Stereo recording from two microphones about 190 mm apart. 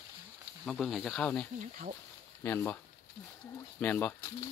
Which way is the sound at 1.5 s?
40° right (ahead or behind).